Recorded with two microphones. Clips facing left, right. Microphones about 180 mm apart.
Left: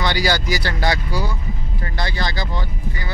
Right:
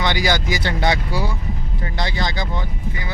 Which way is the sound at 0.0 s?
20° right (ahead or behind).